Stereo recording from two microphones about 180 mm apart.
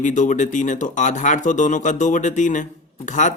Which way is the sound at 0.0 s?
45° left (ahead or behind).